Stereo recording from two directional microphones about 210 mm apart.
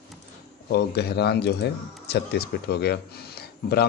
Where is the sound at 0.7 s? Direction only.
50° left (ahead or behind).